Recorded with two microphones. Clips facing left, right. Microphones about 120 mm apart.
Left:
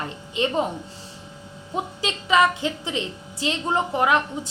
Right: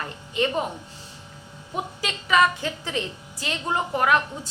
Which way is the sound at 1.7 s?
25° left (ahead or behind).